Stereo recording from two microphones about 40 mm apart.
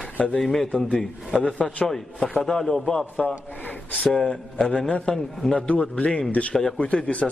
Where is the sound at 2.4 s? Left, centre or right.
Centre.